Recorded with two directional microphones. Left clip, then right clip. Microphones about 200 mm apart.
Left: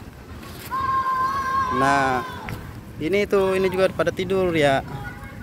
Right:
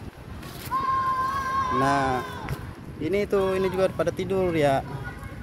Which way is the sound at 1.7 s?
10° right (ahead or behind).